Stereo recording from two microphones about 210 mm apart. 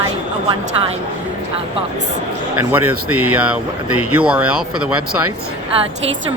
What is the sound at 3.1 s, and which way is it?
Speech, 90° right.